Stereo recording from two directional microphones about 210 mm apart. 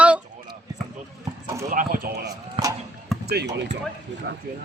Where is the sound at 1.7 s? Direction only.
40° right (ahead or behind).